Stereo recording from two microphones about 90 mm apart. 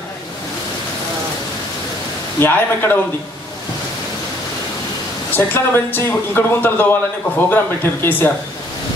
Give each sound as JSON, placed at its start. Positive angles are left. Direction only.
{"t": 2.4, "sound": "speech", "side_deg": 25}
{"t": 5.3, "sound": "speech", "side_deg": 20}